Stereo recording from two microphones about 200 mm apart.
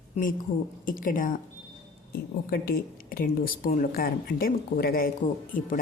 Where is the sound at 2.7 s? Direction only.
45° left (ahead or behind).